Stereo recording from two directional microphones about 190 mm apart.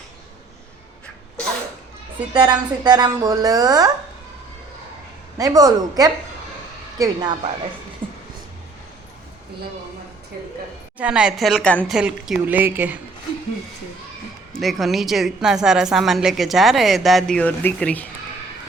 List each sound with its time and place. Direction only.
2.3 s speech: 20° right (ahead or behind)
5.4 s speech: 20° right (ahead or behind)
8.0 s beatboxing: 25° right (ahead or behind)
10.9 s a woman's voice: 5° right (ahead or behind)
11.9 s speech: 5° right (ahead or behind)
14.5 s a woman's voice: centre (ahead or behind)